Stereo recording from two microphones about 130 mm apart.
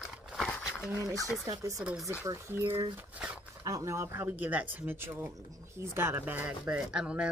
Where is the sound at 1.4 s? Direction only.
25° right (ahead or behind).